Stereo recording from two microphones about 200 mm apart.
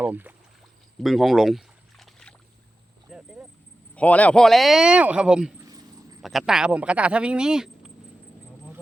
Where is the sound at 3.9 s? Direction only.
5° left (ahead or behind).